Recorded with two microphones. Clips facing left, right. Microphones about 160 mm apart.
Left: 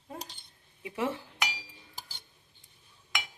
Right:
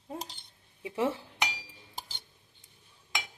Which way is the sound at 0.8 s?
30° right (ahead or behind).